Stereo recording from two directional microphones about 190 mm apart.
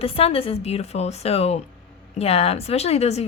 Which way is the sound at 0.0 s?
30° left (ahead or behind).